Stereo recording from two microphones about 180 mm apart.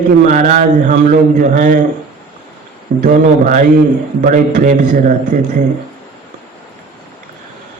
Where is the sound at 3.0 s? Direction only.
45° right (ahead or behind).